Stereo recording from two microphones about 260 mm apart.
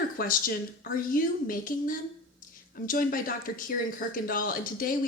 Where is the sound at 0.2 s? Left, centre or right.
Left.